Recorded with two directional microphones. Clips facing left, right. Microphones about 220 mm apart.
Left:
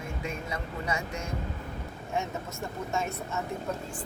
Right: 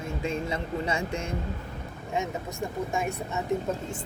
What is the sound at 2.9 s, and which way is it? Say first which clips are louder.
Speech: left 1 dB; 15° right (ahead or behind).